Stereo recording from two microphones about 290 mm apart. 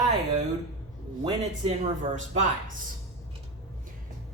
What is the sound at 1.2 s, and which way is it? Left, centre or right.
Speech, centre.